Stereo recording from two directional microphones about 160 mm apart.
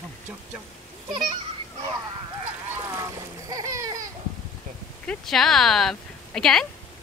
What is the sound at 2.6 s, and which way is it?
Splash, 15° right (ahead or behind).